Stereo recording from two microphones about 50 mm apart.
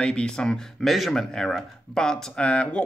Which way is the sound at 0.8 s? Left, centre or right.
Centre.